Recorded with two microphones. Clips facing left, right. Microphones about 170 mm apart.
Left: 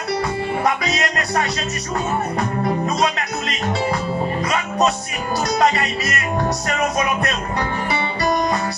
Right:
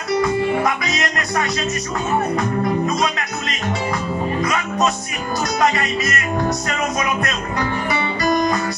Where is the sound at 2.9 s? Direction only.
35° left (ahead or behind).